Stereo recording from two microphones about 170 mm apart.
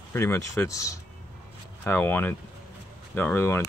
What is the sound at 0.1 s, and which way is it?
Speech, 15° left (ahead or behind).